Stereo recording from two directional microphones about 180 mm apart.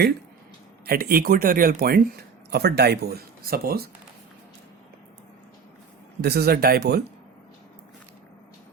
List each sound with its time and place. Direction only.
0.9 s speech: 55° right (ahead or behind)
6.2 s speech: 60° right (ahead or behind)